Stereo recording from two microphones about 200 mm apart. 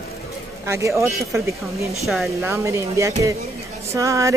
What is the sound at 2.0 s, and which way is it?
Speech, centre (ahead or behind).